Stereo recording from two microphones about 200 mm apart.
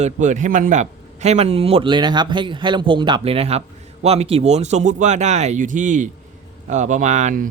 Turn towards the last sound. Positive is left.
turn(degrees=-40)  # may be behind; listen again after turning